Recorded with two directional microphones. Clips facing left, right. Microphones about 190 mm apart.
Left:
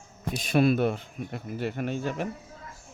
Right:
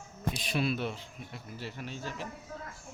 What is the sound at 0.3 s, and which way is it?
Speech, 50° left (ahead or behind).